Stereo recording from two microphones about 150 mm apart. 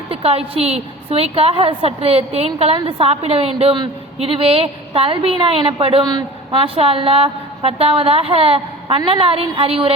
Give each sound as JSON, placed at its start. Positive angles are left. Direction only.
{"t": 0.1, "sound": "a woman's voice", "side_deg": -40}